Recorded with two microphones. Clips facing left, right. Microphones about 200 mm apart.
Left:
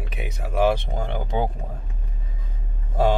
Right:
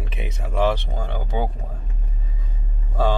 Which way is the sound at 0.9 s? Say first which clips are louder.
Left 1 dB; 20° left (ahead or behind).